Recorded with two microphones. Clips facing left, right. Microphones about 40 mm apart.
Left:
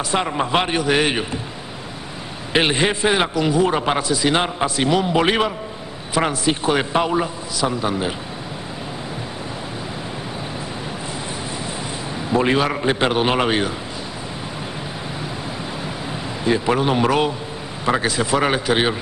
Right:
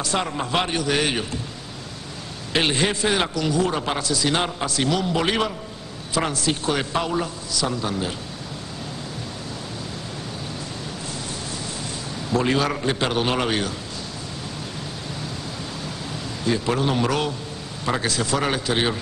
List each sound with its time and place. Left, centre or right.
0.1 s a man's voice: left
2.5 s a man's voice: left
12.3 s a man's voice: left
16.4 s a man's voice: left